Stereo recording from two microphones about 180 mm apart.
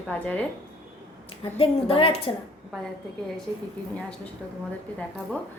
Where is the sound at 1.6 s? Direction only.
30° left (ahead or behind).